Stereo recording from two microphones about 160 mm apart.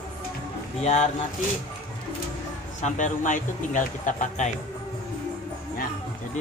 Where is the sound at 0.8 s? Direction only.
45° left (ahead or behind).